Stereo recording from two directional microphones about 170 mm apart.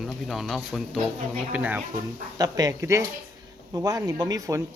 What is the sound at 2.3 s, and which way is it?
Speech, 20° right (ahead or behind).